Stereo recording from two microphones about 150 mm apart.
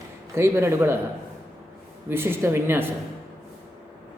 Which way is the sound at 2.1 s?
15° right (ahead or behind).